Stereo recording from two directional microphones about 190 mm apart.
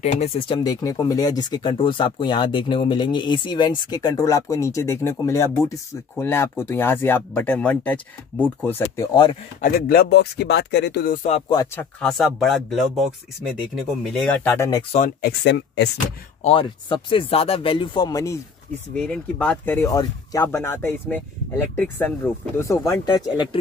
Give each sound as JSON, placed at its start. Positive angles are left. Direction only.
{"t": 0.0, "sound": "speech", "side_deg": 30}
{"t": 0.7, "sound": "speech", "side_deg": 20}
{"t": 9.6, "sound": "speech", "side_deg": 55}
{"t": 11.7, "sound": "speech", "side_deg": 5}
{"t": 14.0, "sound": "speech", "side_deg": 5}
{"t": 15.2, "sound": "speech", "side_deg": 65}
{"t": 16.4, "sound": "speech", "side_deg": 25}
{"t": 18.9, "sound": "speech", "side_deg": 5}